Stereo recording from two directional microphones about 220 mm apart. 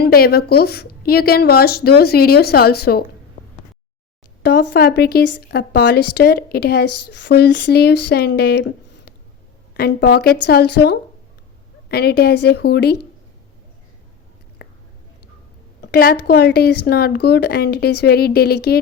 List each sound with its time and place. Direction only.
0.0 s a woman's voice: 45° left (ahead or behind)
4.4 s a woman's voice: 45° left (ahead or behind)
6.8 s speech: 90° left
7.1 s a woman's voice: 55° left (ahead or behind)
14.6 s whispering: 45° left (ahead or behind)
15.8 s a sound: 45° left (ahead or behind)
16.2 s a woman's voice: 45° left (ahead or behind)